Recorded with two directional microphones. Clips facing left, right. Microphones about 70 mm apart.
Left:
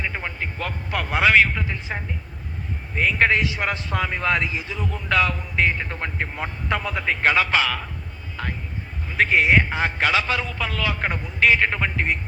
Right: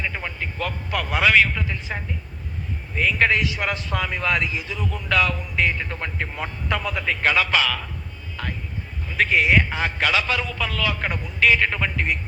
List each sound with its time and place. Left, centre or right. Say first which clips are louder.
0.0 s a man's voice: even; left